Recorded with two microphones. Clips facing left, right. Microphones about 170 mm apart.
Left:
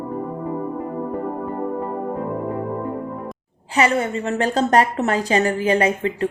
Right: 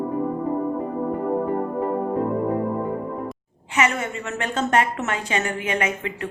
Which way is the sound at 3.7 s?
35° left (ahead or behind).